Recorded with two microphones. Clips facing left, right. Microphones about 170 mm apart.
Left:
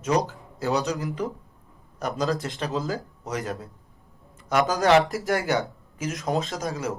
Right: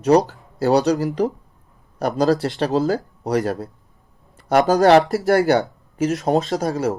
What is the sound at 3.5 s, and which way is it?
A man's voice, 40° right (ahead or behind).